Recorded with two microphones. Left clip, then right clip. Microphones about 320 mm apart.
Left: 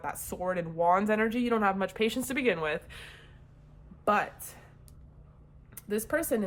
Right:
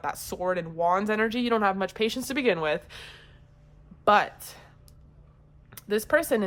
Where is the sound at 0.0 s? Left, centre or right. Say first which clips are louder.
Right 4 dB; centre.